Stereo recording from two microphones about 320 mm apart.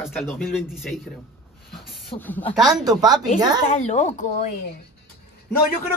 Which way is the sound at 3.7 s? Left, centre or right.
Left.